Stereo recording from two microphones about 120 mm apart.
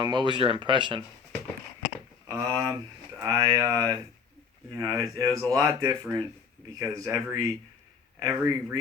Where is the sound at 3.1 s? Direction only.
30° right (ahead or behind).